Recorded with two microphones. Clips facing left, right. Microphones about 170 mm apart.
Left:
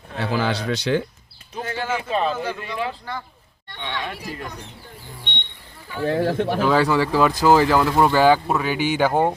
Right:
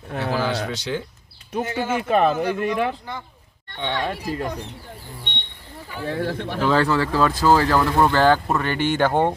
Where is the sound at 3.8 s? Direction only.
35° right (ahead or behind).